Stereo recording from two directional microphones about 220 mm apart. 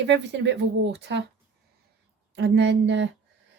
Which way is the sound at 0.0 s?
50° right (ahead or behind).